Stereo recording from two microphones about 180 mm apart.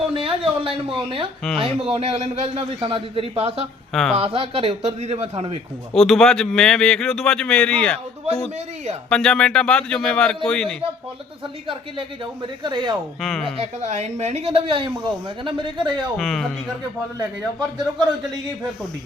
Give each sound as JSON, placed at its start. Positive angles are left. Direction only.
{"t": 0.1, "sound": "speech", "side_deg": -30}
{"t": 3.9, "sound": "speech", "side_deg": 0}
{"t": 4.2, "sound": "speech", "side_deg": -30}
{"t": 5.9, "sound": "speech", "side_deg": 0}
{"t": 9.0, "sound": "speech", "side_deg": 5}
{"t": 11.7, "sound": "a woman's voice", "side_deg": -30}
{"t": 13.2, "sound": "speech", "side_deg": 0}
{"t": 13.6, "sound": "speech", "side_deg": -40}
{"t": 16.1, "sound": "speech", "side_deg": 0}